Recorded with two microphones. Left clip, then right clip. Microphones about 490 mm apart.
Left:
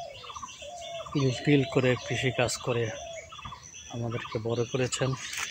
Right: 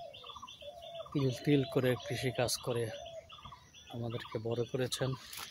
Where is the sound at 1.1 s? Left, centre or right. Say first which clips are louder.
Left 6 dB; right.